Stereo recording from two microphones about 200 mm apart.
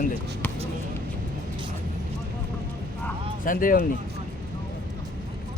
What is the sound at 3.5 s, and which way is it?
Speech, 45° left (ahead or behind).